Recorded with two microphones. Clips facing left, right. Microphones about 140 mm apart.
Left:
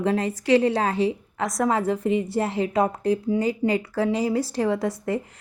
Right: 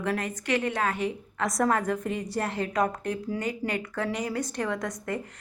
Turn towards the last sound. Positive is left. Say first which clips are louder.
# left 7 dB
turn(degrees=30)  # may be behind; listen again after turning